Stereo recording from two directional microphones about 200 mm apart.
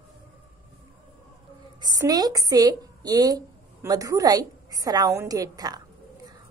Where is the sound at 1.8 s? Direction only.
20° right (ahead or behind).